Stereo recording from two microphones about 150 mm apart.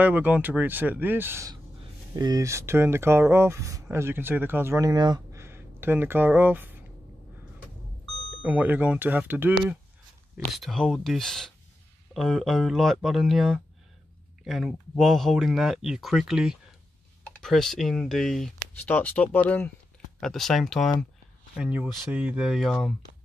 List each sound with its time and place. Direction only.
0.0 s speech: 10° right (ahead or behind)
8.4 s speech: 10° right (ahead or behind)
10.3 s speech: centre (ahead or behind)